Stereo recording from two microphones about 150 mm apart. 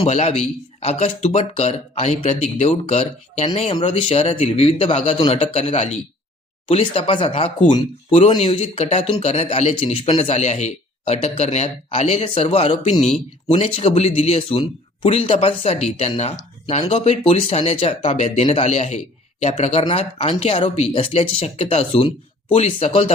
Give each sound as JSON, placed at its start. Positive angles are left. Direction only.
{"t": 0.0, "sound": "a man's voice", "side_deg": 45}
{"t": 13.5, "sound": "a man's voice", "side_deg": 35}